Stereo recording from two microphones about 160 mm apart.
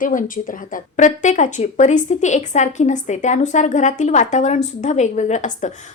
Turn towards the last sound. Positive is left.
turn(degrees=50)  # may be behind; listen again after turning